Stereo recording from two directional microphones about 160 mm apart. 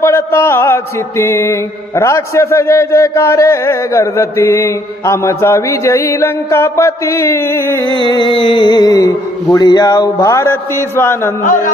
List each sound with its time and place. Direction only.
0.0 s mantra: 15° left (ahead or behind)
8.0 s speech: 30° left (ahead or behind)
10.3 s mantra: 15° left (ahead or behind)
11.4 s a man's voice: 55° left (ahead or behind)